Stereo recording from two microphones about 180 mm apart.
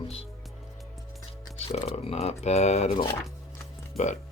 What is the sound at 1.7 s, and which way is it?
Speech, 40° left (ahead or behind).